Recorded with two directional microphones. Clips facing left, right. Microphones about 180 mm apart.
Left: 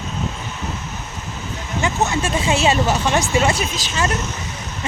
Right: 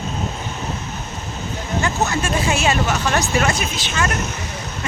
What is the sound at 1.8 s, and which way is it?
Speech, 25° left (ahead or behind).